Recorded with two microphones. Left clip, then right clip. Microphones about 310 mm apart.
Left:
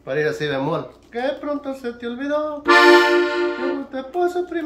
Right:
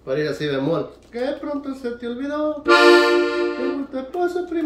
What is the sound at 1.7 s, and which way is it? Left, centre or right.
Speech, centre.